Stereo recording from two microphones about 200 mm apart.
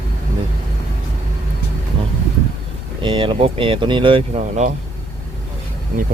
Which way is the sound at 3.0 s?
25° right (ahead or behind).